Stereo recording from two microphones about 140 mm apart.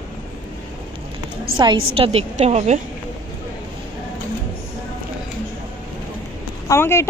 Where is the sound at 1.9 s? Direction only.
45° right (ahead or behind).